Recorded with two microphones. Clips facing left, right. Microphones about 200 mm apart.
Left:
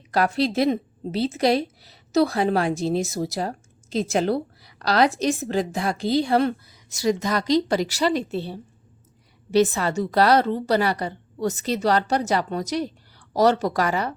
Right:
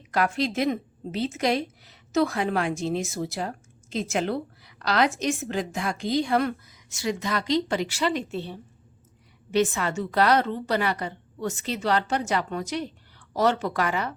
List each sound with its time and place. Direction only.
0.1 s a woman's voice: 35° left (ahead or behind)